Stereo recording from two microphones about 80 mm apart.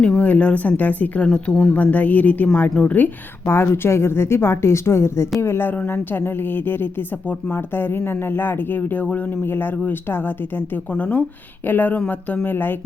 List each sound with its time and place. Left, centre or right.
0.2 s a woman's voice: centre
2.9 s a woman's voice: left